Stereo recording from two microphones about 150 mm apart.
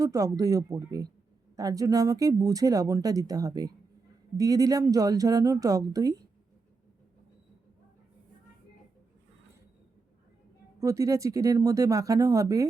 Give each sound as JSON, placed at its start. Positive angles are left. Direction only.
{"t": 0.0, "sound": "speech", "side_deg": -25}
{"t": 10.8, "sound": "speech", "side_deg": -20}